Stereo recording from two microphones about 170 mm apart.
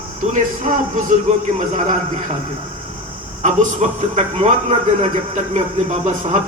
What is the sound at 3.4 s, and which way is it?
A man's voice, 40° right (ahead or behind).